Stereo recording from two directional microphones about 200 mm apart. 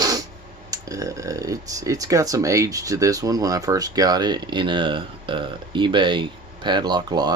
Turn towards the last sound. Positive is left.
turn(degrees=-20)  # may be behind; listen again after turning